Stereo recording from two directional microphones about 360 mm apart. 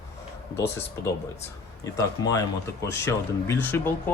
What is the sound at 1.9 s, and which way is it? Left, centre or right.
Speech, centre.